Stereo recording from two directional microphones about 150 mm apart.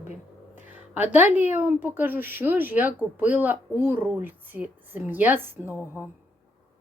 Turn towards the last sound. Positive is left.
turn(degrees=-15)  # may be behind; listen again after turning